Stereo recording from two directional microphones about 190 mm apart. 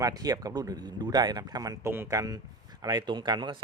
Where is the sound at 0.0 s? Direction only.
20° right (ahead or behind).